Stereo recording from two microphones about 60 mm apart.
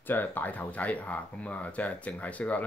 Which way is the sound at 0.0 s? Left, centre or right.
Left.